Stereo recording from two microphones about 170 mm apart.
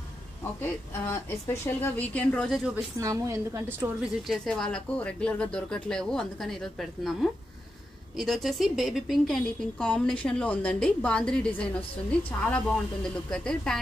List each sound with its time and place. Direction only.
0.6 s a woman's voice: 15° left (ahead or behind)
2.7 s a woman's voice: 20° right (ahead or behind)
4.3 s a woman's voice: 5° left (ahead or behind)